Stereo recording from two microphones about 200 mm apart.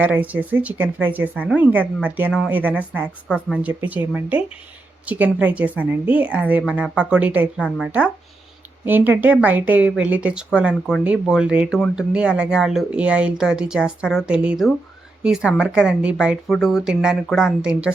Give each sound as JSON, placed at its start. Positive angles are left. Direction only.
{"t": 0.0, "sound": "speech", "side_deg": -10}